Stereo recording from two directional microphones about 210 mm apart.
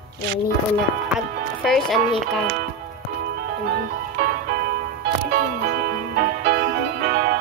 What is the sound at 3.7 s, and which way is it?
Music, 50° right (ahead or behind).